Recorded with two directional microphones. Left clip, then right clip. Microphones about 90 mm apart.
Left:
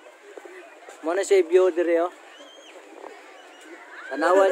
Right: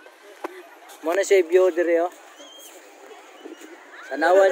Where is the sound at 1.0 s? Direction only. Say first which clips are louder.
Right 2 dB; 10° left (ahead or behind).